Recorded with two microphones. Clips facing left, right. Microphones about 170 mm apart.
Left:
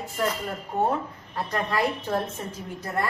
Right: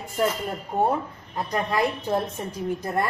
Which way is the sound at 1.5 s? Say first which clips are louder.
Right 2 dB; 15° right (ahead or behind).